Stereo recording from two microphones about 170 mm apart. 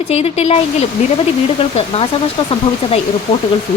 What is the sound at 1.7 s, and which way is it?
Speech, 35° left (ahead or behind).